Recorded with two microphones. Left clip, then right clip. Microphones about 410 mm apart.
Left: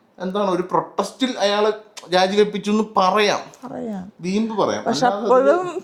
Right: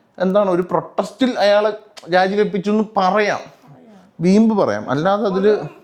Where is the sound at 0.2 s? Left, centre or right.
Right.